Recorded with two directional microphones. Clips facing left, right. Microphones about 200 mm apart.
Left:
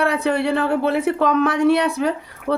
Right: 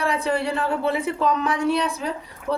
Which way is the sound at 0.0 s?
65° left (ahead or behind).